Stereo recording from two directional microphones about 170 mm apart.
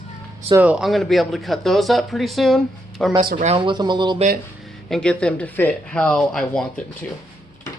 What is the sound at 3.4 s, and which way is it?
Speech, 30° right (ahead or behind).